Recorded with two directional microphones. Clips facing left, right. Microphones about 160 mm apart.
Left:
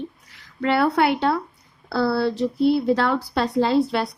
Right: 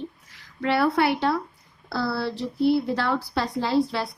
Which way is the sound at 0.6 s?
60° left (ahead or behind).